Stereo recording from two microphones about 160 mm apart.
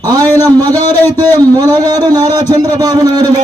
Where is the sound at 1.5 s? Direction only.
25° right (ahead or behind).